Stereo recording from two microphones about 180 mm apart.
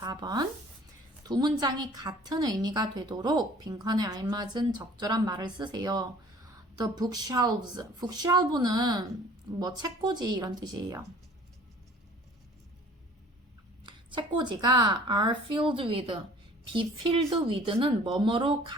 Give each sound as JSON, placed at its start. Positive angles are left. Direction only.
{"t": 0.0, "sound": "a woman's voice", "side_deg": -20}
{"t": 13.8, "sound": "a woman's voice", "side_deg": -25}